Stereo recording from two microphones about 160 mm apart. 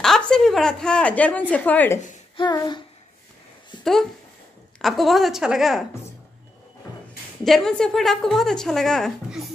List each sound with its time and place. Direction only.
0.0 s a sound: 5° left (ahead or behind)
1.5 s a woman's voice: 10° left (ahead or behind)
2.3 s child singing: 25° left (ahead or behind)
3.8 s a woman's voice: centre (ahead or behind)
7.4 s a woman's voice: 5° left (ahead or behind)